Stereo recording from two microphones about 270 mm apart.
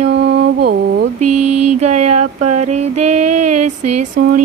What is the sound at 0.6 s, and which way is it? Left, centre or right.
Speech, right.